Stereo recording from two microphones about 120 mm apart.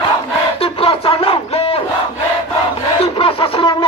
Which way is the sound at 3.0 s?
50° left (ahead or behind).